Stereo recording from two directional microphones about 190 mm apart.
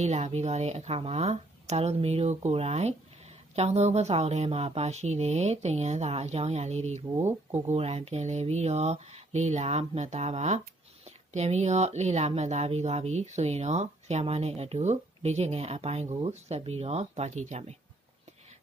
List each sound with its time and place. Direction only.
0.0 s speech: 35° right (ahead or behind)